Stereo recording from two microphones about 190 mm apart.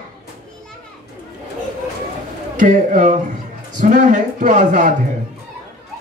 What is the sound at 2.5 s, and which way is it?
Speech, 40° right (ahead or behind).